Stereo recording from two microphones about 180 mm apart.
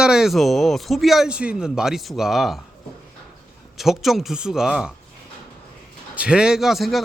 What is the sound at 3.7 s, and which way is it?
Speech, centre (ahead or behind).